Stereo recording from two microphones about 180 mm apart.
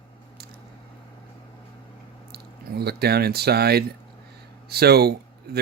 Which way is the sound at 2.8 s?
60° right (ahead or behind).